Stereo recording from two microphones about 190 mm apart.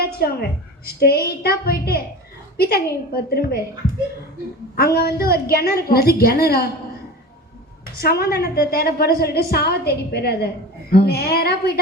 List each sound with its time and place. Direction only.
0.0 s a sound: 55° left (ahead or behind)
0.9 s a woman's voice: 55° left (ahead or behind)
4.8 s a woman's voice: 55° left (ahead or behind)
7.9 s a woman's voice: 55° left (ahead or behind)